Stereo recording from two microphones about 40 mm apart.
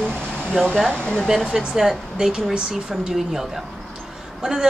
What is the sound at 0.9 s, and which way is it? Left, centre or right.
Speech, left.